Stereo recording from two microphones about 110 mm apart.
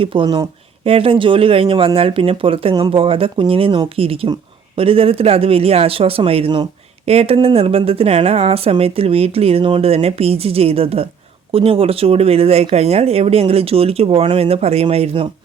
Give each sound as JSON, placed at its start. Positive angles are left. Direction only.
{"t": 0.0, "sound": "speech", "side_deg": -50}
{"t": 2.7, "sound": "speech", "side_deg": -45}
{"t": 7.0, "sound": "speech", "side_deg": -70}